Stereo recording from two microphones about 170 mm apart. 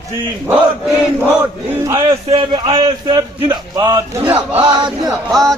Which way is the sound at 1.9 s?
30° right (ahead or behind).